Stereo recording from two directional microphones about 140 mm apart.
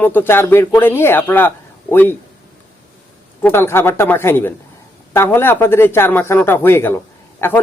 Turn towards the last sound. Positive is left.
turn(degrees=15)  # may be behind; listen again after turning